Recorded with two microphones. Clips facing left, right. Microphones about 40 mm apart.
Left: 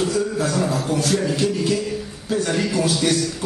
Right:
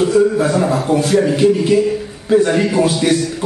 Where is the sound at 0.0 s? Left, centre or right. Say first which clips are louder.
Right 8 dB; right.